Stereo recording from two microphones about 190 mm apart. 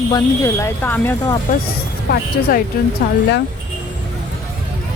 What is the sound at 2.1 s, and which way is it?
Speech, 55° left (ahead or behind).